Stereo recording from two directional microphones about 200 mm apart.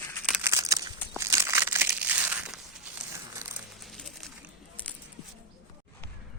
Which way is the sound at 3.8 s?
Centre (ahead or behind).